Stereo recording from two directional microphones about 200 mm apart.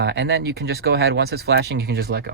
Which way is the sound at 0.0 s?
60° right (ahead or behind).